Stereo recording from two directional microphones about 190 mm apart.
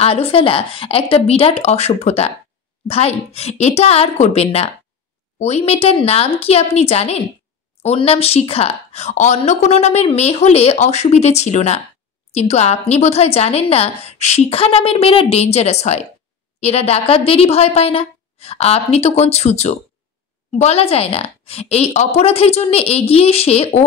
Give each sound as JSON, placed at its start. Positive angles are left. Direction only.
{"t": 0.0, "sound": "a woman's voice", "side_deg": 30}